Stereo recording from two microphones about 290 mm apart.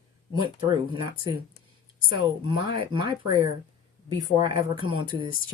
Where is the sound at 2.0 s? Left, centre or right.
Centre.